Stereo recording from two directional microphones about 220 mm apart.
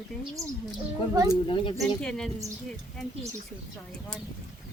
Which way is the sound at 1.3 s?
20° left (ahead or behind).